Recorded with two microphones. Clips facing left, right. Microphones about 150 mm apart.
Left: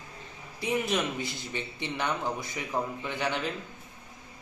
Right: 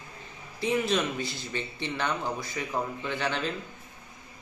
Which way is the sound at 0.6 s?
15° left (ahead or behind).